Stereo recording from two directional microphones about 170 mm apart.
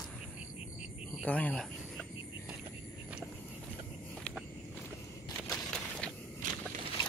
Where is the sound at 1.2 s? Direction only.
10° left (ahead or behind).